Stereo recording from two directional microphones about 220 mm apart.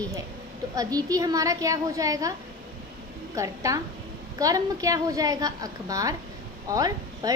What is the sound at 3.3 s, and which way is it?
A woman's voice, 15° right (ahead or behind).